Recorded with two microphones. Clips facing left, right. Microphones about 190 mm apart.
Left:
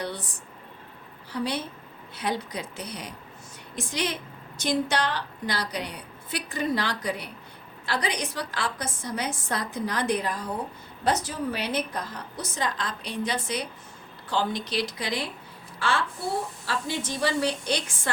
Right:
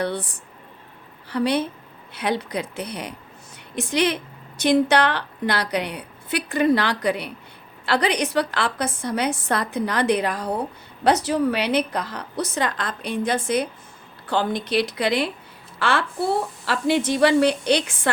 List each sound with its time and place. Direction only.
0.0 s speech: 60° right (ahead or behind)
1.3 s a woman's voice: 70° right (ahead or behind)